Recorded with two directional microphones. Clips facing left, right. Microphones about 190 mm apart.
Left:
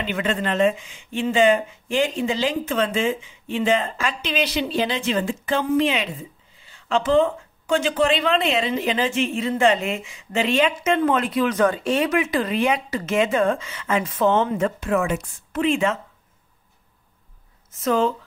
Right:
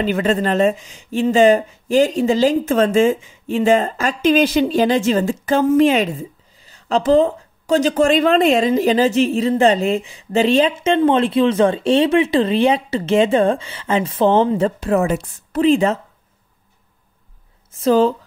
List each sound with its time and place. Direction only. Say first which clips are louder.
0.0 s speech: right 7 dB; 40° right (ahead or behind)
17.7 s speech: right 6 dB; 35° right (ahead or behind)